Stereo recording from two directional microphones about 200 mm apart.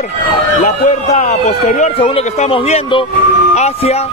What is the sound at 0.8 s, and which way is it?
A man's voice, 40° left (ahead or behind).